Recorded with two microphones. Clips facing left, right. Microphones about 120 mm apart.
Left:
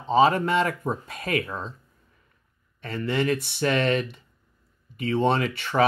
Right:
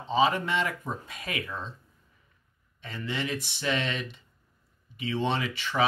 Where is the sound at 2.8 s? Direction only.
55° left (ahead or behind).